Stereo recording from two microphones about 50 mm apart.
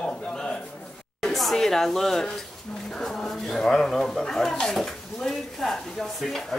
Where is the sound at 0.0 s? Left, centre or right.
Centre.